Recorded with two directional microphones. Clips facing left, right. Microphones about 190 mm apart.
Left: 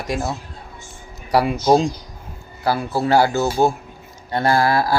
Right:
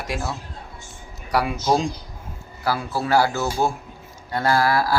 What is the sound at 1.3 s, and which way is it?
Speech, 30° left (ahead or behind).